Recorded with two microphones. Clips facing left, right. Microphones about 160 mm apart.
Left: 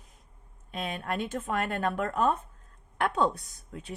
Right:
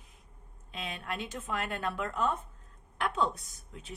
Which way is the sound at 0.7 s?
45° left (ahead or behind).